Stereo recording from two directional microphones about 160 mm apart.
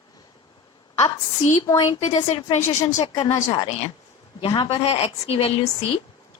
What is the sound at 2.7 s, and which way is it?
Speech, 25° left (ahead or behind).